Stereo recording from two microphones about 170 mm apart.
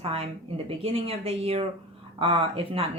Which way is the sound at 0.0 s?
35° right (ahead or behind).